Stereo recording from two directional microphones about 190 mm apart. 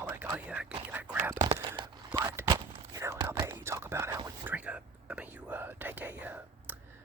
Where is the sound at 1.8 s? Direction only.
25° right (ahead or behind).